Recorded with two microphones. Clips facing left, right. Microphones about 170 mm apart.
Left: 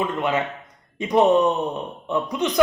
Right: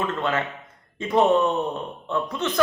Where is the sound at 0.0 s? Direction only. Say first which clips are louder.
Left 2 dB; 15° left (ahead or behind).